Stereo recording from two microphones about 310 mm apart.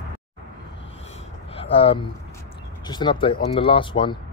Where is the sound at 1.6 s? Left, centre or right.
Centre.